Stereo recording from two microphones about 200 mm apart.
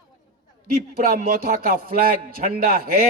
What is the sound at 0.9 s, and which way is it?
A man's voice, 45° right (ahead or behind).